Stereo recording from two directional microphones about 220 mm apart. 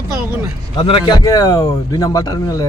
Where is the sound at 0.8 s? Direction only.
25° left (ahead or behind).